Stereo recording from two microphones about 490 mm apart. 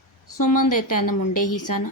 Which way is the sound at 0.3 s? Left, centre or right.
Left.